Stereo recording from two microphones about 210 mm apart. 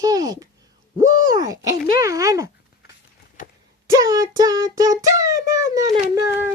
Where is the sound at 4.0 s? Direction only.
15° right (ahead or behind).